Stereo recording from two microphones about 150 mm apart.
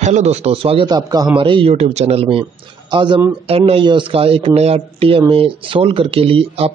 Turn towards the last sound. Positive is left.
turn(degrees=-40)  # may be behind; listen again after turning